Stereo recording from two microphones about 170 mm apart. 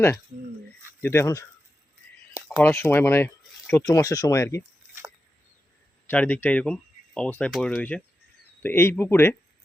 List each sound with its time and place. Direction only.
1.0 s speech: 15° left (ahead or behind)
2.5 s speech: 10° left (ahead or behind)
6.1 s speech: 10° left (ahead or behind)